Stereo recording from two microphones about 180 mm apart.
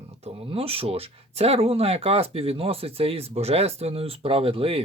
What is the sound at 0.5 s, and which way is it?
Speech, 30° right (ahead or behind).